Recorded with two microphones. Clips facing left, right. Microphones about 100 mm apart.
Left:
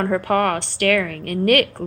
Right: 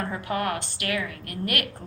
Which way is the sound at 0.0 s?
55° left (ahead or behind).